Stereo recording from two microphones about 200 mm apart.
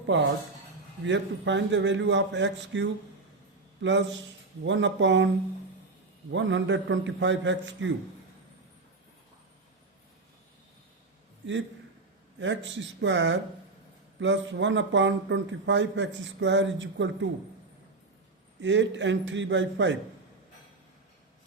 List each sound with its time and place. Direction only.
0.0 s a man's voice: 65° right (ahead or behind)
6.3 s a man's voice: 65° right (ahead or behind)
12.4 s a man's voice: 65° right (ahead or behind)
18.6 s a man's voice: 65° right (ahead or behind)